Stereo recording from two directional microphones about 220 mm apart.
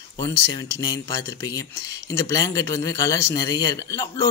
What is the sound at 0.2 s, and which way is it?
Speech, 20° left (ahead or behind).